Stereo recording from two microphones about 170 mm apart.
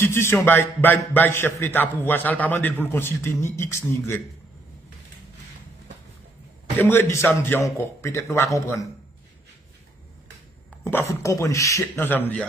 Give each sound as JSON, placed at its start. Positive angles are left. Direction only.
{"t": 0.0, "sound": "a man's voice", "side_deg": 15}
{"t": 6.8, "sound": "a man's voice", "side_deg": 15}
{"t": 10.8, "sound": "a man's voice", "side_deg": 15}